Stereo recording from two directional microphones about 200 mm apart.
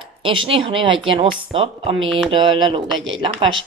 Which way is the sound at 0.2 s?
25° right (ahead or behind).